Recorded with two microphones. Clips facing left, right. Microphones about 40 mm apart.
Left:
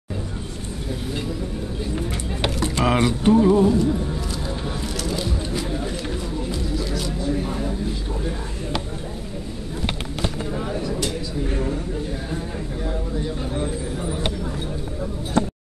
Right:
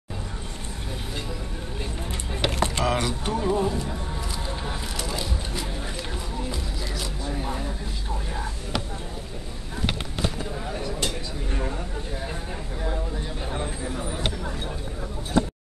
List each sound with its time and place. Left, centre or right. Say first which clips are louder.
2.8 s speech: left 11 dB; centre
3.5 s speech: left 8 dB; centre
4.6 s music: left 4 dB; centre
5.2 s shuffling cards: left 5 dB; centre
6.5 s a sound: left 6 dB; centre
14.0 s a sound: left 4 dB; centre